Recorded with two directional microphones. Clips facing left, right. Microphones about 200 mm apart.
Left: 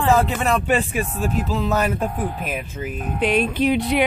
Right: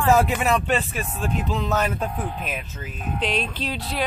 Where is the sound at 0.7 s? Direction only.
10° left (ahead or behind).